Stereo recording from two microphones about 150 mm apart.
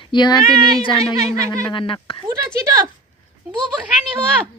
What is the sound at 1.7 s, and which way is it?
Speech, 35° left (ahead or behind).